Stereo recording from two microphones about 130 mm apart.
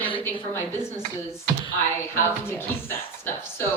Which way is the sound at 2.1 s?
15° left (ahead or behind).